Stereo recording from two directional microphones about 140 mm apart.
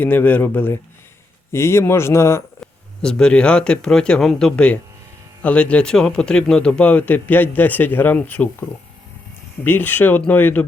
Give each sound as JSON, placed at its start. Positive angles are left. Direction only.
{"t": 0.0, "sound": "speech", "side_deg": 15}
{"t": 3.0, "sound": "speech", "side_deg": 5}
{"t": 9.6, "sound": "speech", "side_deg": 15}